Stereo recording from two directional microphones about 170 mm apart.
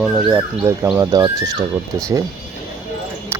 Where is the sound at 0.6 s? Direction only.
20° right (ahead or behind).